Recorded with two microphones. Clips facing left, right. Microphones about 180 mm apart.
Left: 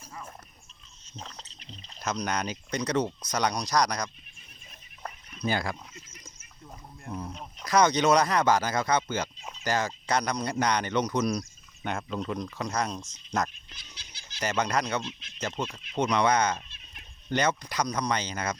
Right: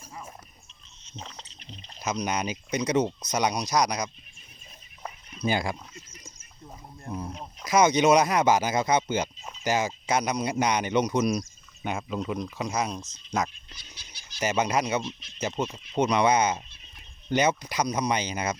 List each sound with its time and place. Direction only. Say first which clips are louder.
1.1 s a sound: right 1 dB; centre (ahead or behind)
2.0 s speech: right 2 dB; 5° right (ahead or behind)
5.0 s a sound: right 2 dB; 15° right (ahead or behind)
7.1 s speech: right 2 dB; 10° right (ahead or behind)
14.6 s speech: right 2 dB; 10° right (ahead or behind)
16.0 s speech: right 2 dB; 5° right (ahead or behind)